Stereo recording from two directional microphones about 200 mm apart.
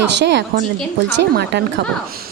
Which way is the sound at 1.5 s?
60° right (ahead or behind).